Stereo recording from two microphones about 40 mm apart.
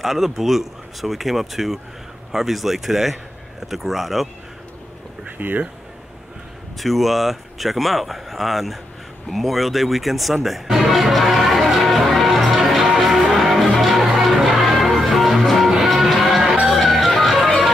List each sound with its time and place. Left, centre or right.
0.0 s speech: centre
5.4 s speech: right
6.8 s speech: centre
9.3 s music: centre